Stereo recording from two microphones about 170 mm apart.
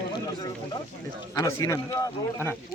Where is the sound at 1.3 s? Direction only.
20° left (ahead or behind).